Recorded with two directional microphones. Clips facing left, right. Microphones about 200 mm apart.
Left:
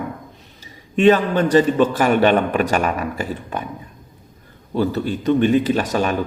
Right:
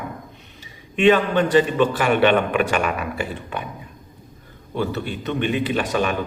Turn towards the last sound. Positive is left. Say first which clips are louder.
# left 3 dB
turn(degrees=40)  # may be behind; listen again after turning